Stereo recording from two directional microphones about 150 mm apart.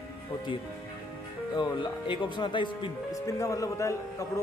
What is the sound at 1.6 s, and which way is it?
Speech, 35° left (ahead or behind).